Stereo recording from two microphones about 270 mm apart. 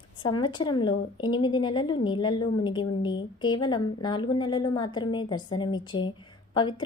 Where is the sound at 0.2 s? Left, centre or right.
Centre.